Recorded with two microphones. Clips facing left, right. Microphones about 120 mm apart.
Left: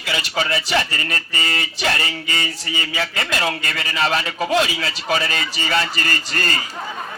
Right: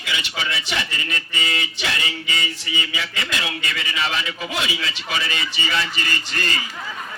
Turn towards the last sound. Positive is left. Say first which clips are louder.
# left 2 dB
turn(degrees=40)  # may be behind; listen again after turning